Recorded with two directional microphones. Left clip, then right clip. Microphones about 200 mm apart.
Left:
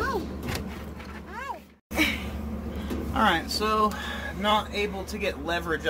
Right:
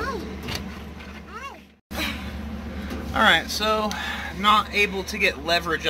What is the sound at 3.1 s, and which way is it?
Speech, 20° right (ahead or behind).